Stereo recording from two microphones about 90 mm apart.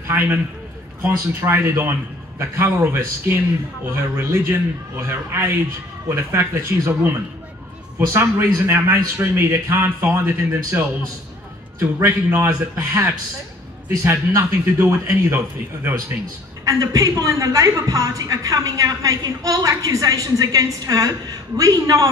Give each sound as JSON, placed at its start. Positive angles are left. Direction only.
{"t": 0.1, "sound": "a man's voice", "side_deg": -20}
{"t": 12.0, "sound": "a man's voice", "side_deg": -30}
{"t": 16.6, "sound": "a woman's voice", "side_deg": -40}